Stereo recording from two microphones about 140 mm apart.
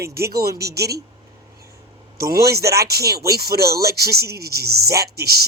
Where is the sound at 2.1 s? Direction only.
90° right.